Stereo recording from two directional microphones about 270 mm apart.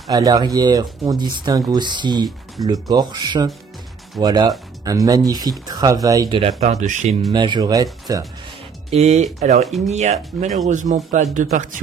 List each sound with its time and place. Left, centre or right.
0.1 s speech: centre
7.3 s speech: centre
8.9 s speech: right